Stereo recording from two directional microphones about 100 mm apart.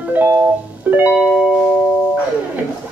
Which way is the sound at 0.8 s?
15° right (ahead or behind).